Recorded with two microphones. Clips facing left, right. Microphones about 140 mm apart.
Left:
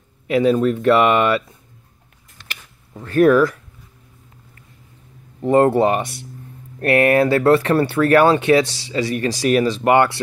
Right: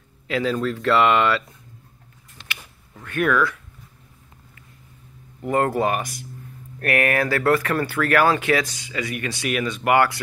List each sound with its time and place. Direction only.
0.3 s speech: 20° left (ahead or behind)
2.4 s a sound: 40° left (ahead or behind)
3.0 s speech: 35° left (ahead or behind)
5.4 s speech: 25° left (ahead or behind)